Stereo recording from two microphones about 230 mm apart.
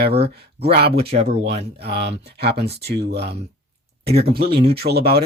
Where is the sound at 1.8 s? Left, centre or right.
Right.